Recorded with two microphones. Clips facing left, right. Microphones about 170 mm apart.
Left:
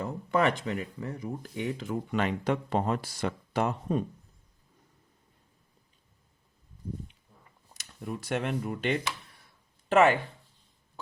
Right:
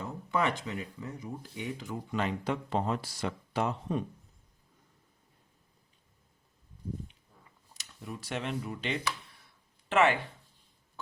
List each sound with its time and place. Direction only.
0.0 s speech: 55° left (ahead or behind)
7.8 s speech: 50° left (ahead or behind)
9.9 s speech: 40° left (ahead or behind)